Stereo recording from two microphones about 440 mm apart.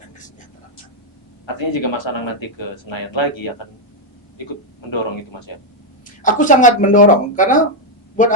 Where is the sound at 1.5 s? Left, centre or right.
Left.